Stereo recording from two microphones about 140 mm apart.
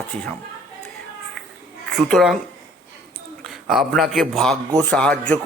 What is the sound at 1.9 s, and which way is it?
Speech, centre (ahead or behind).